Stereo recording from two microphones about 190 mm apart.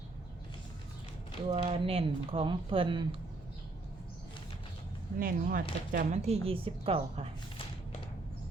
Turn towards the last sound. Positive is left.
turn(degrees=-30)  # may be behind; listen again after turning